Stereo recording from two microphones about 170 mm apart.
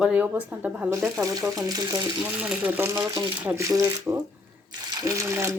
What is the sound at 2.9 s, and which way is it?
Speech, 20° right (ahead or behind).